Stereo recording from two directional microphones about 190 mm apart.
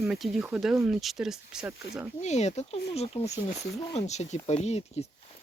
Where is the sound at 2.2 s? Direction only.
35° left (ahead or behind).